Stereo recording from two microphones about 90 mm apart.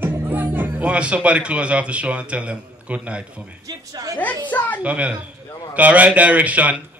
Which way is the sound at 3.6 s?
45° right (ahead or behind).